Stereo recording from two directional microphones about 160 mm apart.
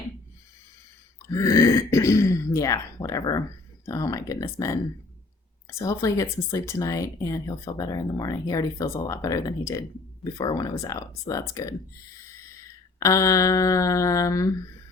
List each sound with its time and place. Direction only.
1.3 s speech: 20° left (ahead or behind)
13.0 s speech: 20° left (ahead or behind)